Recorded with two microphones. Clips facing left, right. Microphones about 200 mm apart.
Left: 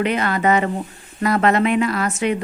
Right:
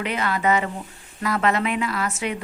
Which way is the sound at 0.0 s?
60° left (ahead or behind).